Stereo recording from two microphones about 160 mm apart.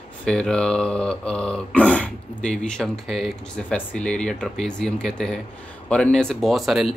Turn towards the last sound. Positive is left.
turn(degrees=0)  # may be behind; listen again after turning